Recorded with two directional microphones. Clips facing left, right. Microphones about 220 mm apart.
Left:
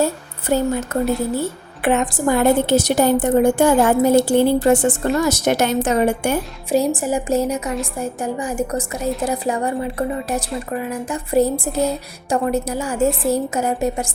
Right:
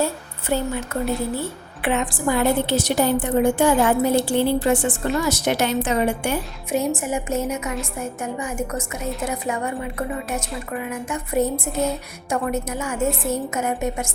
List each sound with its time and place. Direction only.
0.0 s a woman's voice: 40° left (ahead or behind)
11.7 s speech: centre (ahead or behind)
12.3 s a woman's voice: 35° left (ahead or behind)